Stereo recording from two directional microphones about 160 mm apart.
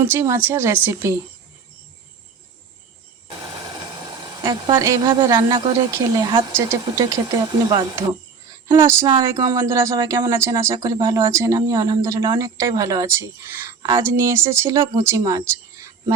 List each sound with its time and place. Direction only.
0.0 s a woman's voice: 15° right (ahead or behind)
4.4 s a woman's voice: 30° right (ahead or behind)
8.4 s cricket: 20° right (ahead or behind)
9.2 s a woman's voice: 20° right (ahead or behind)